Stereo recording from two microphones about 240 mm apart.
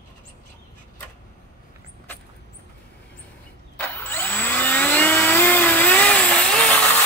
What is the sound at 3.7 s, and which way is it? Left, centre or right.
Vacuum cleaner, centre.